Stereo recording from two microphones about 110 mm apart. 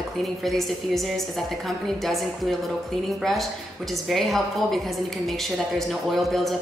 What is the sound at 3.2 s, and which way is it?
A woman's voice, centre (ahead or behind).